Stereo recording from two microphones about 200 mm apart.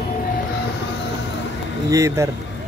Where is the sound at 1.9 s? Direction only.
15° right (ahead or behind).